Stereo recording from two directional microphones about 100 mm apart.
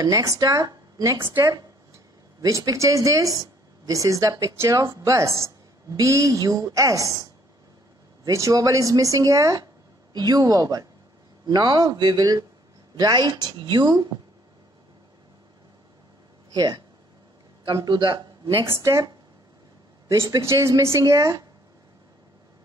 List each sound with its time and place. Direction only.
0.0 s speech: 35° right (ahead or behind)
8.3 s a woman's voice: 30° right (ahead or behind)
16.5 s a woman's voice: 45° right (ahead or behind)
17.8 s speech: 45° right (ahead or behind)
18.7 s speech: 30° right (ahead or behind)
20.1 s speech: 30° right (ahead or behind)